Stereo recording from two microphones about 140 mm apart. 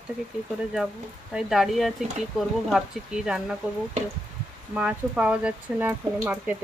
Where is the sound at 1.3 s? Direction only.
Centre (ahead or behind).